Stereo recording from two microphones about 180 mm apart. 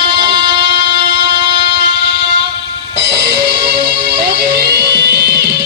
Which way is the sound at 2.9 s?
65° right (ahead or behind).